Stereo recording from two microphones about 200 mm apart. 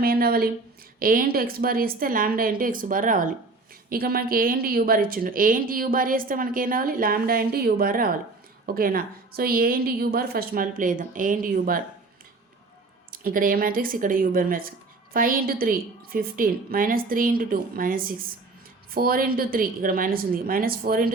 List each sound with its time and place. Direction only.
0.0 s speech: 50° right (ahead or behind)
13.1 s speech: 45° right (ahead or behind)